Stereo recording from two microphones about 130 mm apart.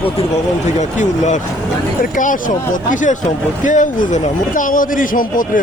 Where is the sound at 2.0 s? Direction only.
85° left.